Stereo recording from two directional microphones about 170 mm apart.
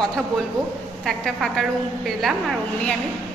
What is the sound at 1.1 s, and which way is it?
A woman's voice, centre (ahead or behind).